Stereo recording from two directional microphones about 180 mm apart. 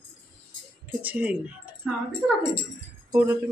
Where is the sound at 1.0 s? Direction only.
10° right (ahead or behind).